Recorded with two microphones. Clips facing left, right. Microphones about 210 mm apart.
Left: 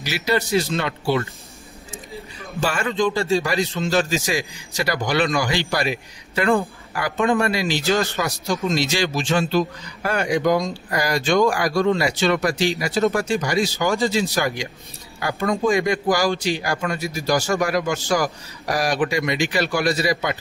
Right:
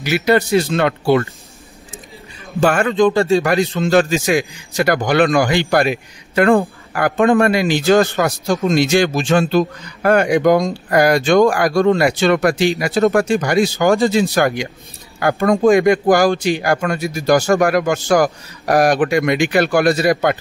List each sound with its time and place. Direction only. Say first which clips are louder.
0.0 s a man's voice: right 7 dB; 60° right (ahead or behind)
2.6 s a man's voice: right 8 dB; 55° right (ahead or behind)